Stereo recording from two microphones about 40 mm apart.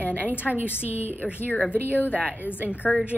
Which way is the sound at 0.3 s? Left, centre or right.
Right.